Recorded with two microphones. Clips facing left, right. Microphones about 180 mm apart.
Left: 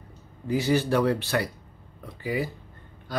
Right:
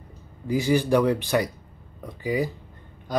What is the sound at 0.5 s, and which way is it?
Speech, 15° right (ahead or behind).